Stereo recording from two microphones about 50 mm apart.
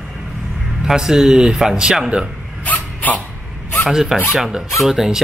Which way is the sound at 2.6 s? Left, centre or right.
Left.